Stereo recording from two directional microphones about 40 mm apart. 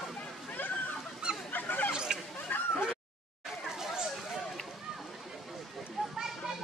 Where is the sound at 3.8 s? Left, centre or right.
Centre.